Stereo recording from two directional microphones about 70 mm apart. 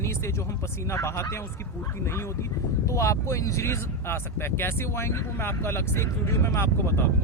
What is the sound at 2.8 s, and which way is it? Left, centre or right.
Speech, left.